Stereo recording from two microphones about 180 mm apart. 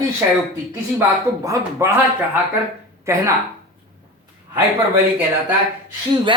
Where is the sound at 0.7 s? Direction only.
15° right (ahead or behind).